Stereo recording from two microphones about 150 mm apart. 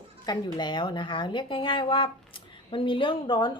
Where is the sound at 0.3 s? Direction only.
30° left (ahead or behind).